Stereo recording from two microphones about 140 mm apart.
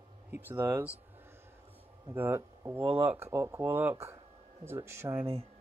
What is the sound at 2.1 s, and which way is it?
Speech, 15° right (ahead or behind).